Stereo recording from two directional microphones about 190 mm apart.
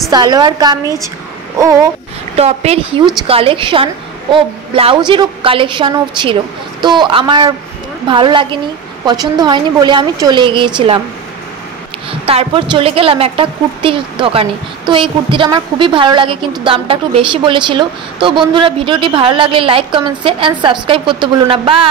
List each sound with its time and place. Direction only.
0.1 s a woman's voice: 20° right (ahead or behind)
2.3 s a woman's voice: 35° right (ahead or behind)
12.1 s a woman's voice: 30° right (ahead or behind)